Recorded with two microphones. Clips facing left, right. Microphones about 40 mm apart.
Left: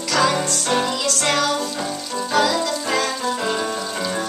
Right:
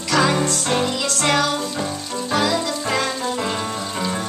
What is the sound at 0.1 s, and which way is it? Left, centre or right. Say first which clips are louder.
Music: right 1 dB; centre.